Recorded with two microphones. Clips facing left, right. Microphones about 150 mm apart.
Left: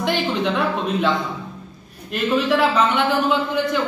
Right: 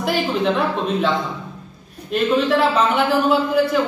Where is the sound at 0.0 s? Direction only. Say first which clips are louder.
Right 1 dB; 5° right (ahead or behind).